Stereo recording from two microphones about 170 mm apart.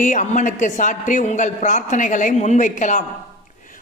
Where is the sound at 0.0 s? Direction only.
45° left (ahead or behind).